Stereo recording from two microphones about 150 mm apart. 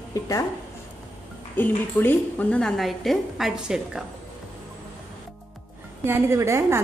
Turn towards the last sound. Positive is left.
turn(degrees=-15)  # may be behind; listen again after turning